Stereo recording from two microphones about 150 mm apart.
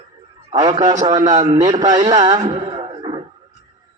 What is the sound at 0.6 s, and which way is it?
A man's voice, 25° right (ahead or behind).